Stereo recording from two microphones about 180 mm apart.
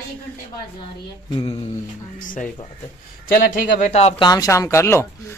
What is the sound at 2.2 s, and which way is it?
Speech, 45° left (ahead or behind).